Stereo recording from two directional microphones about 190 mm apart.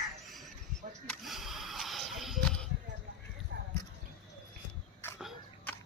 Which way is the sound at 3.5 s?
75° right (ahead or behind).